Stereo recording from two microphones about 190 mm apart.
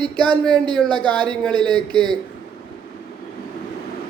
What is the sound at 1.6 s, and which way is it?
Speech, 5° left (ahead or behind).